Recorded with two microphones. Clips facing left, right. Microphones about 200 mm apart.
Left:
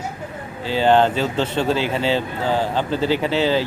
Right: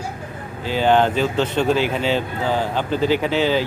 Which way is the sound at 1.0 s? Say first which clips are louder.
Right 1 dB; 10° right (ahead or behind).